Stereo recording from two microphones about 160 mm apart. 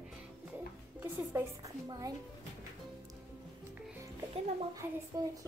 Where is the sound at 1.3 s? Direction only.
20° right (ahead or behind).